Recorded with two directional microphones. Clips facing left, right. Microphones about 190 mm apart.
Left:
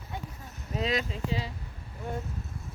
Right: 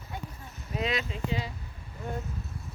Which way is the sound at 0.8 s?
35° left (ahead or behind).